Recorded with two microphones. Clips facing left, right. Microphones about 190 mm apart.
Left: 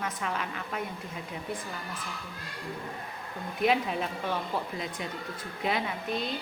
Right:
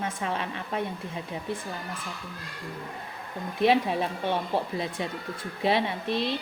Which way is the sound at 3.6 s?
30° right (ahead or behind).